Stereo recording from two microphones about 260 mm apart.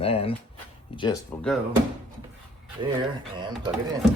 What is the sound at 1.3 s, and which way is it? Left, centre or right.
Speech, centre.